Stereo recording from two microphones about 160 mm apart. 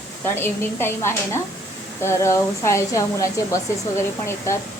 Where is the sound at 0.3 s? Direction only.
15° left (ahead or behind).